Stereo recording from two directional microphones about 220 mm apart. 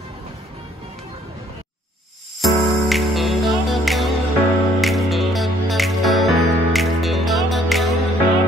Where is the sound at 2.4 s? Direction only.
Centre (ahead or behind).